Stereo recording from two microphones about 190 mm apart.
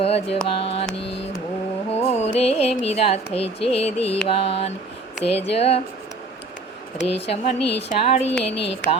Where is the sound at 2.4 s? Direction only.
30° left (ahead or behind).